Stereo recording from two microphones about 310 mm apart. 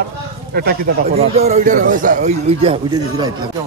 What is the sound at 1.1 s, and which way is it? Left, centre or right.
A man's voice, centre.